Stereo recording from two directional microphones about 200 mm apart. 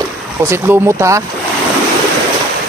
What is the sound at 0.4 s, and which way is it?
Speech, 10° right (ahead or behind).